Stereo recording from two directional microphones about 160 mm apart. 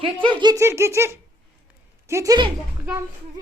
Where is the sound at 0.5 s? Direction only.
15° right (ahead or behind).